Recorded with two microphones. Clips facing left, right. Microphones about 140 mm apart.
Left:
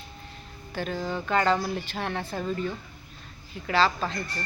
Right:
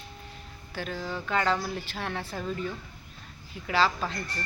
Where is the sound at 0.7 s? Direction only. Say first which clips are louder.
Left 4 dB; centre (ahead or behind).